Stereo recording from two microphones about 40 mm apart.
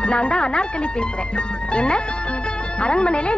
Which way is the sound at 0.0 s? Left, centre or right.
Left.